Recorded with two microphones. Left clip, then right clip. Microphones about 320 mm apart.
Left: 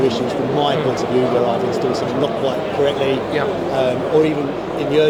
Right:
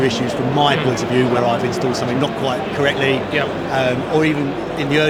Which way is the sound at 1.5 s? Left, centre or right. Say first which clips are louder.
Even; right.